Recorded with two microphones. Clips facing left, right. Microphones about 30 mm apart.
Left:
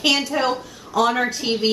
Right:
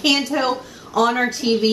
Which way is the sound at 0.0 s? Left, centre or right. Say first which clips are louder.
Right 1 dB; centre.